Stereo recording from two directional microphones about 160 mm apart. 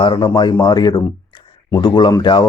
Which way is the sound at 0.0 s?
30° left (ahead or behind).